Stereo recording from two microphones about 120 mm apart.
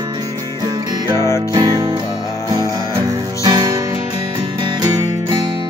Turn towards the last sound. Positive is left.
turn(degrees=-25)  # may be behind; listen again after turning